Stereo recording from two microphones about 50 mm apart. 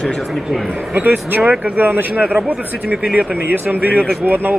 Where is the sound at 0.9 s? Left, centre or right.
Right.